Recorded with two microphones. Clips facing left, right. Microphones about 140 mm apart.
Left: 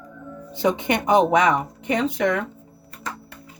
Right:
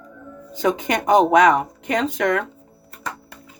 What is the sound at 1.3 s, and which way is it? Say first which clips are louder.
Speech: right 4 dB; 85° right.